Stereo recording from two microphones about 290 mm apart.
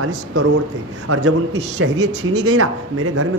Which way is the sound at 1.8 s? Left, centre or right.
Right.